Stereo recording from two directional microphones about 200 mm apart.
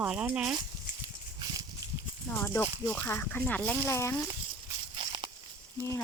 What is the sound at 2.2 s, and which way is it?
Speech, 10° left (ahead or behind).